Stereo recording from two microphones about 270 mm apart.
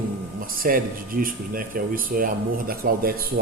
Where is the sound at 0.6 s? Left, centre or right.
Right.